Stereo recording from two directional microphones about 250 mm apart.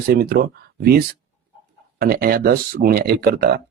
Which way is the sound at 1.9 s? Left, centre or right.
Right.